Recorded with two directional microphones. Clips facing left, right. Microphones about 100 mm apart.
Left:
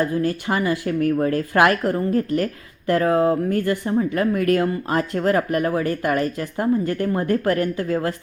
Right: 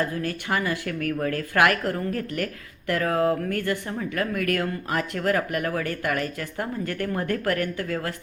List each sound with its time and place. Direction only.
0.2 s a woman's voice: 25° left (ahead or behind)